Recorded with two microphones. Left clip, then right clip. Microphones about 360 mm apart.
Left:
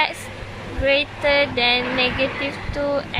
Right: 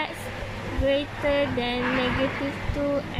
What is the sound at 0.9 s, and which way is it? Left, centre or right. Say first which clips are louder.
Speech: left 6 dB; left.